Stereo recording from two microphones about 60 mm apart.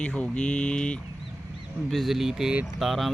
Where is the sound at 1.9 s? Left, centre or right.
Centre.